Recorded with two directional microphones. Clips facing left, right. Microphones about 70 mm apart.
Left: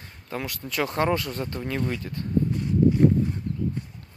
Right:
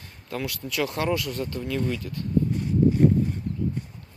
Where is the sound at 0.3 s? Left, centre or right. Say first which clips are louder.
Right 1 dB; left.